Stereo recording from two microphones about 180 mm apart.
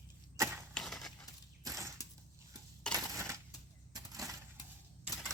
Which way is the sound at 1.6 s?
20° right (ahead or behind).